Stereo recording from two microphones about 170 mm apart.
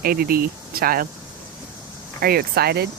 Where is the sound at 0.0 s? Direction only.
60° right (ahead or behind).